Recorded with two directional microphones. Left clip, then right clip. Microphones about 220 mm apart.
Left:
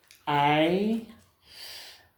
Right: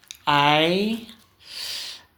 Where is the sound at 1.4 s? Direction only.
40° right (ahead or behind).